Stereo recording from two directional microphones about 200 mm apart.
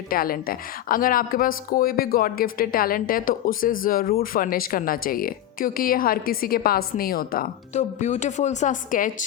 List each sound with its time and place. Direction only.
0.1 s speech: 45° left (ahead or behind)